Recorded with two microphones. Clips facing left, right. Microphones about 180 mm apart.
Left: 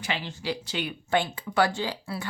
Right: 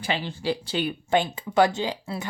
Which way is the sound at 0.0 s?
30° right (ahead or behind).